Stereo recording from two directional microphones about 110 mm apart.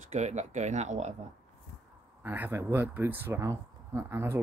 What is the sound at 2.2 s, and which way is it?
Speech, 20° right (ahead or behind).